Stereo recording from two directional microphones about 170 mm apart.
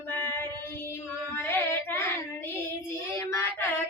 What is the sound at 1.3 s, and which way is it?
Child singing, 15° left (ahead or behind).